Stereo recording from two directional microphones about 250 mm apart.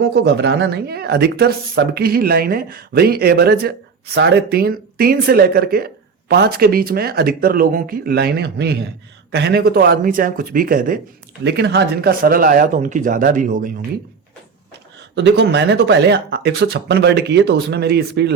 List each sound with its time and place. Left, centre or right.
0.0 s speech: right
15.1 s speech: right